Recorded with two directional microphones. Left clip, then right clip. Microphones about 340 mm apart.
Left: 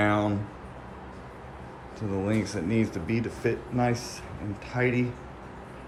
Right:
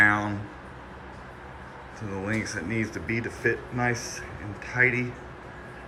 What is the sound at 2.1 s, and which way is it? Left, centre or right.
Speech, centre.